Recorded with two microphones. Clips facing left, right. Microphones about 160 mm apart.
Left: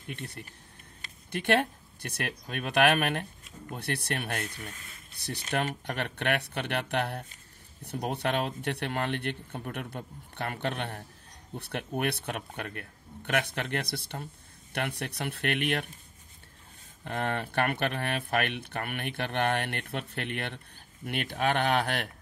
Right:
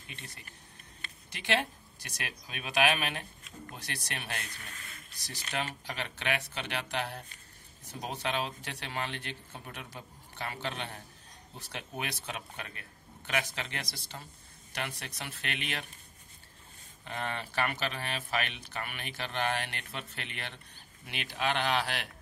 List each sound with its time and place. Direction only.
0.0 s speech: 60° left (ahead or behind)
17.0 s speech: 55° left (ahead or behind)